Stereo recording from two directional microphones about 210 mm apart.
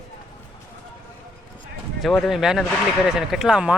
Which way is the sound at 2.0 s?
Centre (ahead or behind).